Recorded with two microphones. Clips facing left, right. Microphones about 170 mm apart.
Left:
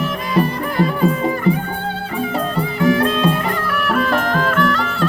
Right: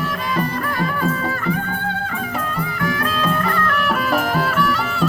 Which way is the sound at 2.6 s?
25° left (ahead or behind).